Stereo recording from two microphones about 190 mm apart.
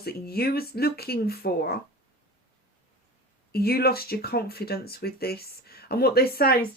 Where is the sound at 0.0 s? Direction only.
55° left (ahead or behind).